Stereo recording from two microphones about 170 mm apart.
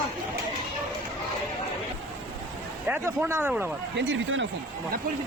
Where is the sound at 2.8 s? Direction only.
10° right (ahead or behind).